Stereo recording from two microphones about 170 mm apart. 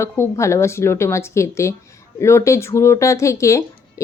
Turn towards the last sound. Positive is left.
turn(degrees=15)  # may be behind; listen again after turning